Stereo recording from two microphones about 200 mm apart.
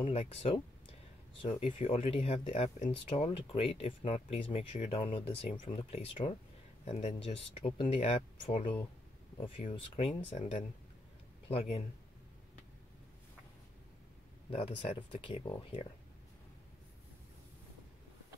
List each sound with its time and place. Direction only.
0.0 s speech: 30° left (ahead or behind)
9.8 s speech: 30° left (ahead or behind)
14.5 s speech: 25° left (ahead or behind)